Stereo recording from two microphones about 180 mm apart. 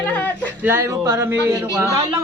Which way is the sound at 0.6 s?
15° right (ahead or behind).